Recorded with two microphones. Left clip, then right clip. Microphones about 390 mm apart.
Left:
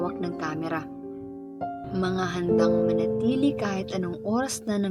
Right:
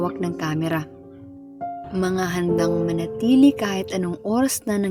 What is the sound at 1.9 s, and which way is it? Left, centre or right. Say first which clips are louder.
Music: right 5 dB; right.